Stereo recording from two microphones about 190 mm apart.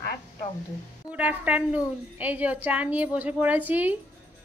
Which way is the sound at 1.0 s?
10° right (ahead or behind).